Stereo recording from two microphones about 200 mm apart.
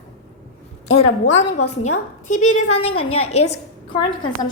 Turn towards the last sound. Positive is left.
turn(degrees=25)  # may be behind; listen again after turning